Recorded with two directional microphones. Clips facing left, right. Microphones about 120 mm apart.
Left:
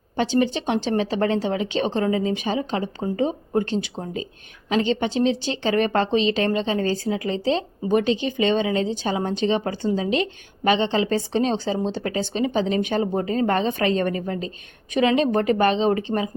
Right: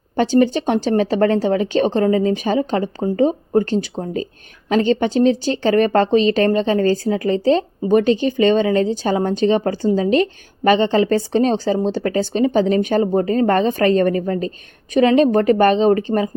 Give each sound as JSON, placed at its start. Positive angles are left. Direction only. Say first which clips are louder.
{"t": 0.2, "sound": "a woman's voice", "louder": "right 6 dB", "side_deg": -45}